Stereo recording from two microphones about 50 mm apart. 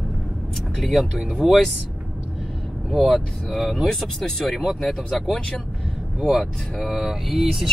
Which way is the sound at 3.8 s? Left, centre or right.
Centre.